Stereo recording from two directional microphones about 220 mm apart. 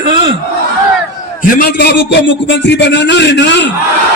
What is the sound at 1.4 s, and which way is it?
A man's voice, 40° left (ahead or behind).